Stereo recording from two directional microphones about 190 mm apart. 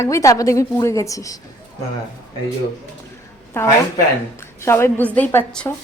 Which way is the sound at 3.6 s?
10° left (ahead or behind).